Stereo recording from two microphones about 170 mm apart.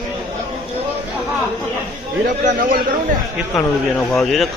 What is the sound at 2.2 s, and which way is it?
Speech, 55° right (ahead or behind).